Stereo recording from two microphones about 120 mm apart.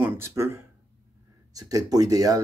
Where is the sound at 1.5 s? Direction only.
30° right (ahead or behind).